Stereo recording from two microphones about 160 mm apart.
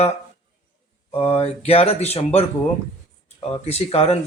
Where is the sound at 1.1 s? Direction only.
40° left (ahead or behind).